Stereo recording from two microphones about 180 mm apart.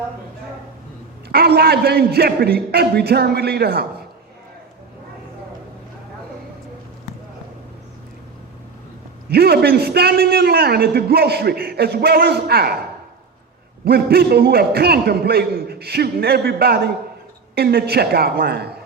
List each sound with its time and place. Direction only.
1.3 s a man's voice: 60° right (ahead or behind)
9.3 s a man's voice: 60° right (ahead or behind)
13.8 s a man's voice: 60° right (ahead or behind)